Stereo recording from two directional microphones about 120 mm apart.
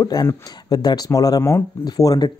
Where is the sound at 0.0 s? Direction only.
30° left (ahead or behind).